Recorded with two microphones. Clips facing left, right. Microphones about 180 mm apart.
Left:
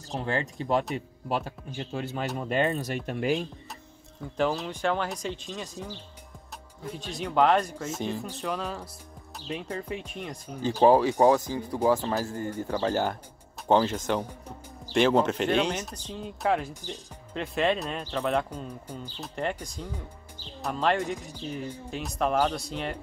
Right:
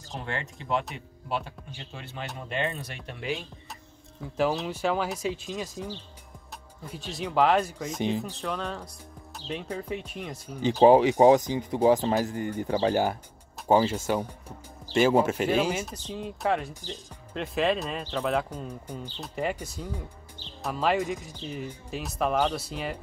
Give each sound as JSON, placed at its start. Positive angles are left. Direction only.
{"t": 0.2, "sound": "speech", "side_deg": 35}
{"t": 4.2, "sound": "speech", "side_deg": -5}
{"t": 6.9, "sound": "speech", "side_deg": 0}
{"t": 10.8, "sound": "speech", "side_deg": -20}